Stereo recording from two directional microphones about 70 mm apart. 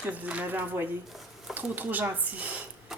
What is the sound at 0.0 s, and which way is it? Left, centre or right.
Speech, right.